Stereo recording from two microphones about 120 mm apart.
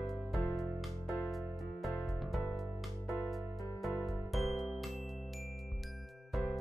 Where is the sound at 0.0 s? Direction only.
Centre (ahead or behind).